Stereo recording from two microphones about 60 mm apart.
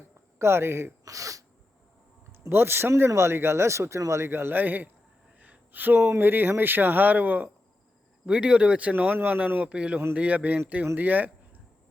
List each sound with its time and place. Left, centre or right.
0.3 s speech: right
1.0 s sneeze: right
2.3 s speech: right
4.3 s speech: right
5.4 s a sound: right
6.1 s speech: right
9.6 s speech: centre